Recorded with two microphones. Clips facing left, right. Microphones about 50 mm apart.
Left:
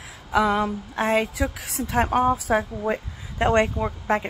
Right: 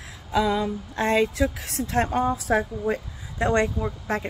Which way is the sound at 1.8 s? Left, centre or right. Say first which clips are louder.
Even; left.